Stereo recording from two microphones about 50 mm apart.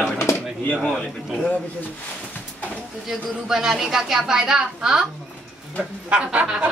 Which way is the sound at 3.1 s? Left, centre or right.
Centre.